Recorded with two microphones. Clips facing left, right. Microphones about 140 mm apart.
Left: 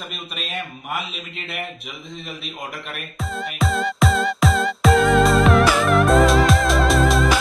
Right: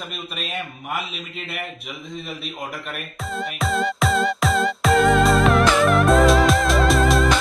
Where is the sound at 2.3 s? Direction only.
Centre (ahead or behind).